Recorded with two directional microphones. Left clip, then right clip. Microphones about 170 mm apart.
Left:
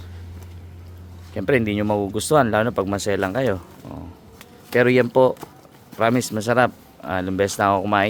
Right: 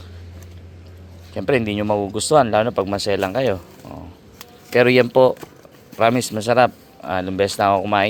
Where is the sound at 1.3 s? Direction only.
15° left (ahead or behind).